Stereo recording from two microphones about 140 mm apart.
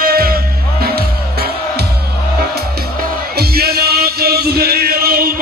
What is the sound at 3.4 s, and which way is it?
Music, 90° right.